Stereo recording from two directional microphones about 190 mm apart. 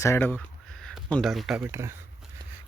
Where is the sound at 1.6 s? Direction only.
15° right (ahead or behind).